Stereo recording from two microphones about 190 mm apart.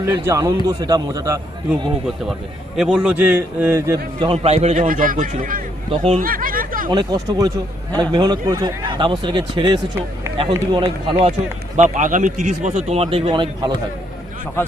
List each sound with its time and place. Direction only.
0.0 s a man's voice: 15° right (ahead or behind)
2.7 s a man's voice: 5° right (ahead or behind)
4.3 s speech: 35° right (ahead or behind)
5.9 s speech: 35° right (ahead or behind)
6.9 s speech: 20° right (ahead or behind)
11.8 s speech: 40° right (ahead or behind); by 13.7 s 25° right (ahead or behind)